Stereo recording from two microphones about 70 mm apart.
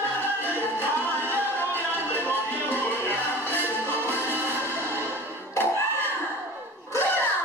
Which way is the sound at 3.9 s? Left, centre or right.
Right.